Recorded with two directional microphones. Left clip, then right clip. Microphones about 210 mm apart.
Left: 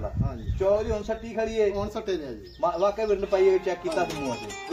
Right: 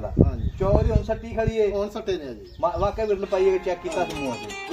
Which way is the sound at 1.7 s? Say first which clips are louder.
Right 3 dB; 5° right (ahead or behind).